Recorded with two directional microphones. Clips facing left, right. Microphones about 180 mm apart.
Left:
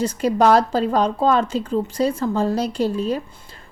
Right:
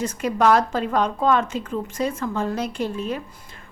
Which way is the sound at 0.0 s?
35° left (ahead or behind).